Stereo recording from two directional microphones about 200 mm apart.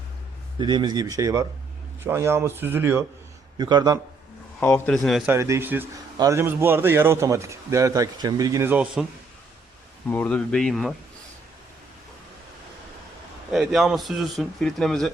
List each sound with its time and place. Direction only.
0.6 s a man's voice: 25° right (ahead or behind)
4.6 s a man's voice: 5° left (ahead or behind)
10.1 s speech: 5° left (ahead or behind)
13.5 s speech: centre (ahead or behind)